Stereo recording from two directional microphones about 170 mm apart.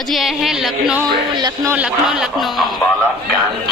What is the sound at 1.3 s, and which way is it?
Speech, 25° right (ahead or behind).